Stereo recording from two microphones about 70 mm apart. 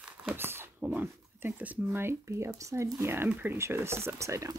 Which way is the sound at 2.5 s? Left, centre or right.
Right.